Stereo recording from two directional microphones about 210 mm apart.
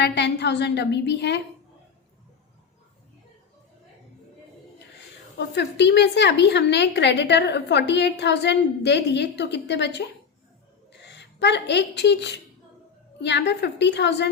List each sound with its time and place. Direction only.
0.0 s a woman's voice: 55° left (ahead or behind)
5.4 s a woman's voice: 55° left (ahead or behind)